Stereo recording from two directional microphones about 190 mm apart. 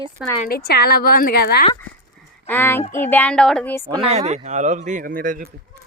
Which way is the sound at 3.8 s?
20° right (ahead or behind).